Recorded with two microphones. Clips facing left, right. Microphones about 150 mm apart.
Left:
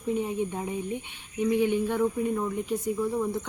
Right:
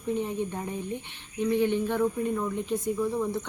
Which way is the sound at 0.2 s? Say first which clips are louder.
Left 1 dB; 10° left (ahead or behind).